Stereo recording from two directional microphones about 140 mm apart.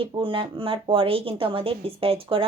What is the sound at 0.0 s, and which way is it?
Speech, 40° right (ahead or behind).